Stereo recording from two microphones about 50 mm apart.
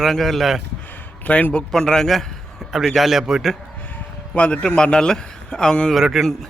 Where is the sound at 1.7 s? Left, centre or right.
Centre.